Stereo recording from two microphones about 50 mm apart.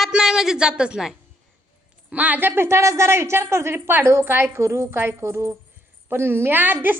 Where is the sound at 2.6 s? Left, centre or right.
Right.